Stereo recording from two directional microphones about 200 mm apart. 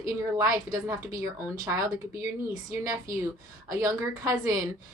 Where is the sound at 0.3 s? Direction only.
15° right (ahead or behind).